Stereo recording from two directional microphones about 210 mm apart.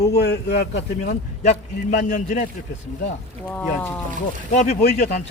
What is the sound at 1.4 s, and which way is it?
A man's voice, 35° left (ahead or behind).